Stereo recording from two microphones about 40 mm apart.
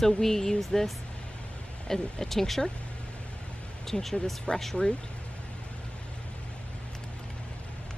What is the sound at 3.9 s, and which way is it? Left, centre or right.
Speech, centre.